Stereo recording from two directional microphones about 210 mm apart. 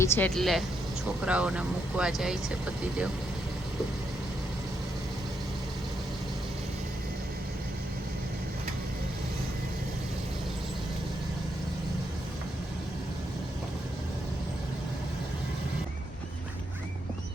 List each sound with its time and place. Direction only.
0.0 s speech: 10° left (ahead or behind)